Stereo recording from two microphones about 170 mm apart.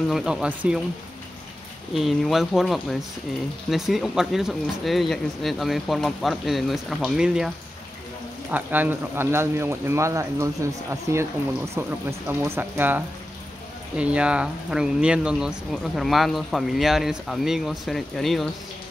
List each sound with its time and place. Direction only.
0.1 s speech: 5° right (ahead or behind)
2.0 s speech: centre (ahead or behind)